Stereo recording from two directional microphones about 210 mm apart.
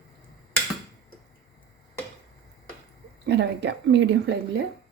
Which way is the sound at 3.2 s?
55° right (ahead or behind).